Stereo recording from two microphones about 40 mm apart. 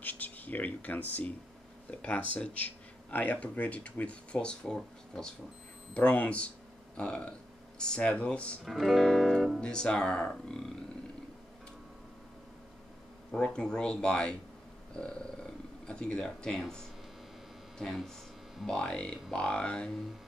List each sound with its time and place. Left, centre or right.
0.0 s speech: left; by 5.3 s centre
5.9 s speech: left
8.6 s speech: centre
9.6 s speech: left
13.4 s speech: left
18.7 s speech: left